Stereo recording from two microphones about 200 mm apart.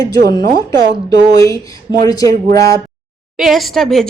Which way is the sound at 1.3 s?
15° left (ahead or behind).